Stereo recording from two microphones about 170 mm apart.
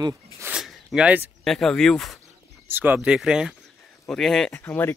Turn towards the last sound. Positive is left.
turn(degrees=10)  # may be behind; listen again after turning